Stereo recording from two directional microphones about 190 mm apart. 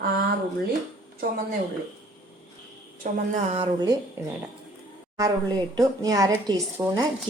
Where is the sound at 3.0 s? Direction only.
40° right (ahead or behind).